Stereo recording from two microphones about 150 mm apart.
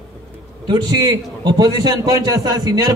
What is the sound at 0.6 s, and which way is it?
A man's voice, 25° right (ahead or behind).